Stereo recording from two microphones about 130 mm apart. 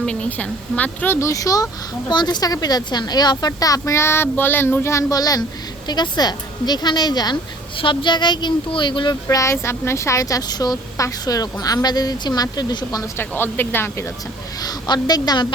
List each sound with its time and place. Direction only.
0.0 s a woman's voice: 10° left (ahead or behind); by 9.1 s 40° left (ahead or behind)
9.2 s speech: 25° left (ahead or behind)
13.1 s speech: 15° left (ahead or behind)
14.6 s a woman's voice: 30° left (ahead or behind)